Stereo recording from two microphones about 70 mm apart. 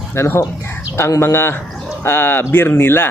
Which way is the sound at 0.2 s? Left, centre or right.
Left.